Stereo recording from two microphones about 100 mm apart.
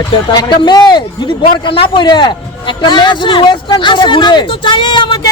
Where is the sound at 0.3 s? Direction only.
45° left (ahead or behind).